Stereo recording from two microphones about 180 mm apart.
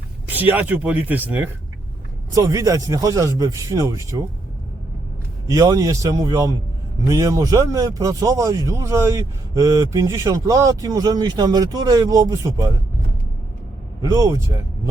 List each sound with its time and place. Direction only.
0.3 s speech: 10° right (ahead or behind)
5.5 s a man's voice: 20° right (ahead or behind)
14.0 s speech: 15° right (ahead or behind)